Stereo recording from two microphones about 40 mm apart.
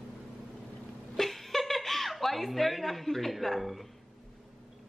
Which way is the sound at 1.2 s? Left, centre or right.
Centre.